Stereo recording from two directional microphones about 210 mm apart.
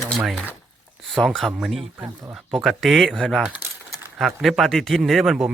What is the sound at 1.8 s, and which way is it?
Speech, 25° right (ahead or behind).